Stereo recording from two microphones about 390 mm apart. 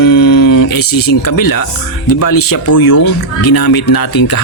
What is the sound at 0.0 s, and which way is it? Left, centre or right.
Music, left.